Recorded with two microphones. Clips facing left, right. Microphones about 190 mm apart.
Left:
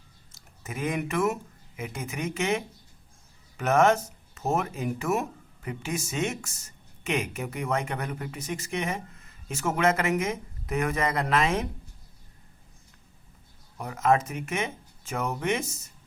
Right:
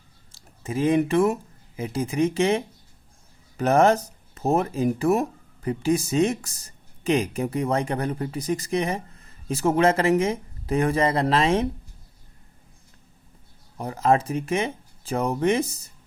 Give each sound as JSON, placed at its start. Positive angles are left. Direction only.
{"t": 0.3, "sound": "speech", "side_deg": -30}
{"t": 13.7, "sound": "speech", "side_deg": -30}